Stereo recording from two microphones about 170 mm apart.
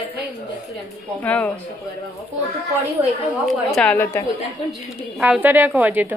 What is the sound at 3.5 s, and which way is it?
Speech, 5° left (ahead or behind).